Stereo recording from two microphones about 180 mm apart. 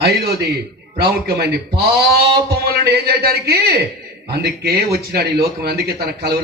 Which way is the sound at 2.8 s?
65° right (ahead or behind).